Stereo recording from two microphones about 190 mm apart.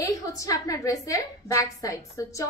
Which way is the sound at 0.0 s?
15° left (ahead or behind).